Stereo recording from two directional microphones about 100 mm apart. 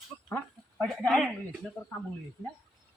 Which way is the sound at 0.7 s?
5° left (ahead or behind).